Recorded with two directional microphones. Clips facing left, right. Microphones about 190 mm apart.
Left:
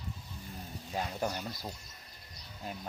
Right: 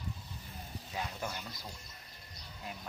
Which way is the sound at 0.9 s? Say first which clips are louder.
Left 5 dB; 40° left (ahead or behind).